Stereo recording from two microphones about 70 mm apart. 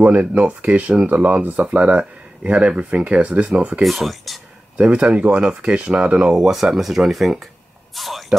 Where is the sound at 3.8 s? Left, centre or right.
Centre.